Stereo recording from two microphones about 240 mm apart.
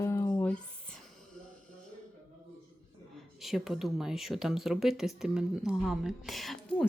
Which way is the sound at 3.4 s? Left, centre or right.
Centre.